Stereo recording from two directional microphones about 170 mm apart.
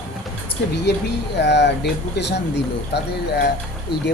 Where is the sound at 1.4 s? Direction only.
90° left.